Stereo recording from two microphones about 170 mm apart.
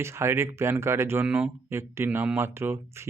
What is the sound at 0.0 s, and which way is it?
Speech, 15° right (ahead or behind).